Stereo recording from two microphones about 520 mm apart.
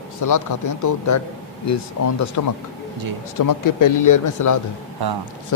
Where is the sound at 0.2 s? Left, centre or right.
Left.